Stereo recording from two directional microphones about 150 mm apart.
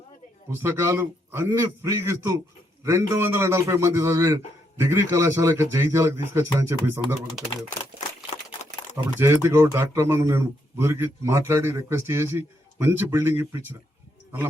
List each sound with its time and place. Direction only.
0.6 s a man's voice: 20° right (ahead or behind)
9.1 s speech: 15° right (ahead or behind)